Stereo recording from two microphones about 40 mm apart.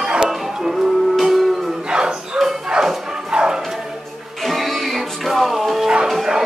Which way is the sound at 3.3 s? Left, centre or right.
Right.